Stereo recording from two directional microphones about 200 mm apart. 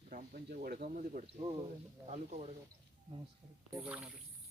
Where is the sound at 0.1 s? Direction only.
45° right (ahead or behind).